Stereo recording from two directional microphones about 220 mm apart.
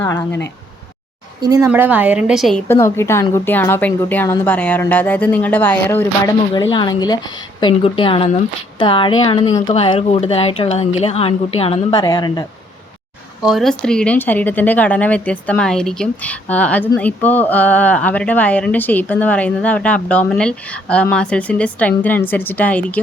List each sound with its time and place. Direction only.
0.0 s speech: 10° left (ahead or behind)
1.4 s a woman's voice: 15° right (ahead or behind)
2.6 s speech: 10° left (ahead or behind)
13.4 s speech: centre (ahead or behind)